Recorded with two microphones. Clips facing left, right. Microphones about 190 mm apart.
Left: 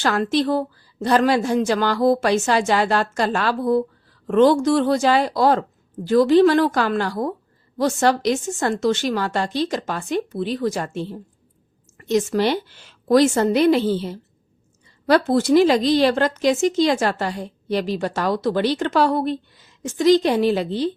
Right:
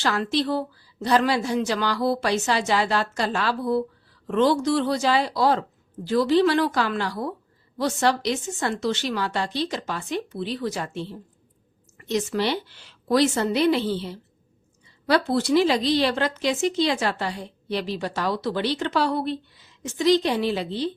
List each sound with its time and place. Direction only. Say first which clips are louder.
0.0 s a woman's voice: left 4 dB; 50° left (ahead or behind)